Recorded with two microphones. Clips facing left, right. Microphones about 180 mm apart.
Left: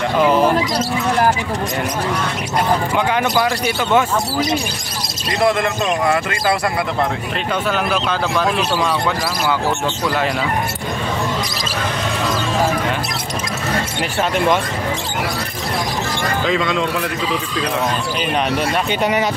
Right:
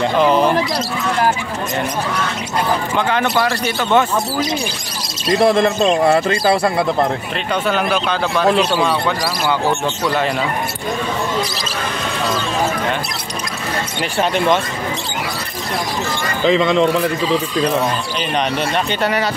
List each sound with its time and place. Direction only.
0.2 s speech: 5° left (ahead or behind)
3.1 s speech: 10° left (ahead or behind)
5.4 s a man's voice: 30° right (ahead or behind)
7.6 s speech: centre (ahead or behind)
16.4 s a man's voice: 25° right (ahead or behind)
18.9 s speech: 15° left (ahead or behind)